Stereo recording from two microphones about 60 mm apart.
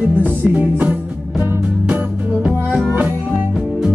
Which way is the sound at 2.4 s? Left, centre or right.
Centre.